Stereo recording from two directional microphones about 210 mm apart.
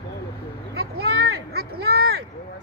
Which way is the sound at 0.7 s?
50° right (ahead or behind).